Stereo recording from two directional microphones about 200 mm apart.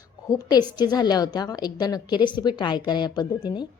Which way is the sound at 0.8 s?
20° left (ahead or behind).